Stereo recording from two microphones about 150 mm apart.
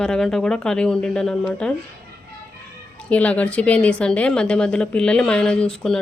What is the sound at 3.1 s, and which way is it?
A woman's voice, 10° left (ahead or behind).